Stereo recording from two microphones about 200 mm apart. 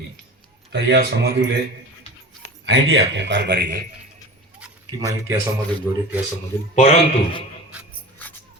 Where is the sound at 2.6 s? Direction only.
65° right (ahead or behind).